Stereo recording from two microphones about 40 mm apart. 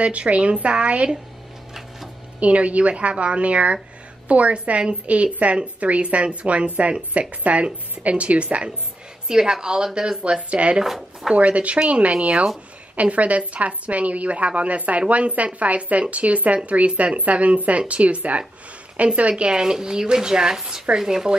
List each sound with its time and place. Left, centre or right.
0.0 s a woman's voice: right
2.4 s a woman's voice: right
9.3 s speech: centre
10.5 s a woman's voice: right
10.8 s speech: centre
11.3 s a woman's voice: right; by 21.4 s centre